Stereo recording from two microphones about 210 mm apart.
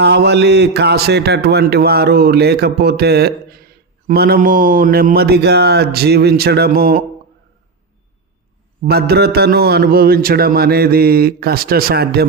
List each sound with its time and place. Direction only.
0.0 s a man's voice: 50° right (ahead or behind)
8.8 s a man's voice: 50° right (ahead or behind)